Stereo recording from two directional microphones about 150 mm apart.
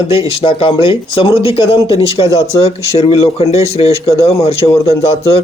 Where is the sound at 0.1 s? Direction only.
40° left (ahead or behind).